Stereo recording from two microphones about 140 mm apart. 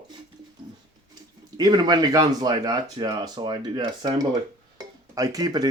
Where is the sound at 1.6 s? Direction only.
30° right (ahead or behind).